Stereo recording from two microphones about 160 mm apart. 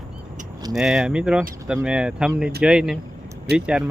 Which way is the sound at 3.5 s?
90° right.